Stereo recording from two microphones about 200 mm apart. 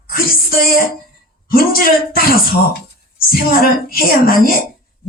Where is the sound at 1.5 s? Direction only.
50° left (ahead or behind).